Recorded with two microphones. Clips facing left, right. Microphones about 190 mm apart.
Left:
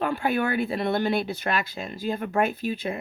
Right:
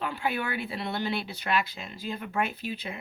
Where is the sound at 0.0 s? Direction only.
50° left (ahead or behind).